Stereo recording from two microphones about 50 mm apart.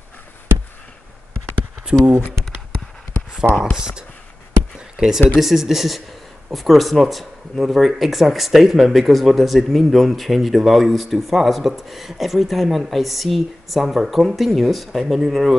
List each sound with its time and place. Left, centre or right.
1.9 s speech: right
3.7 s speech: centre
4.7 s a sound: centre
5.3 s speech: centre